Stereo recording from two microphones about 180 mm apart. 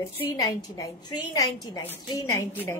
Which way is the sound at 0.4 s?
20° left (ahead or behind).